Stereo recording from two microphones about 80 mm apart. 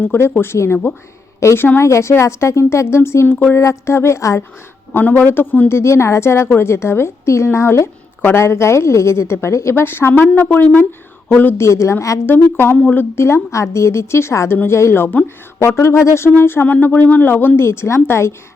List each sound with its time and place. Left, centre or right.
0.0 s speech: left
4.9 s speech: left
12.2 s speech: left